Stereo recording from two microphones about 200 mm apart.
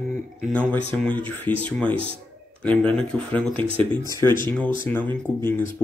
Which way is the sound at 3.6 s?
25° right (ahead or behind).